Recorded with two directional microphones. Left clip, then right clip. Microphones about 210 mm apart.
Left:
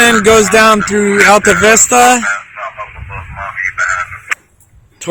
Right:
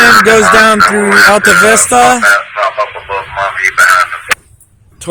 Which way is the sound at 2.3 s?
45° right (ahead or behind).